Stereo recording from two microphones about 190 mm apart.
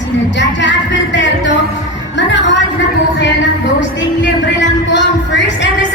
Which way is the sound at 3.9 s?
70° left (ahead or behind).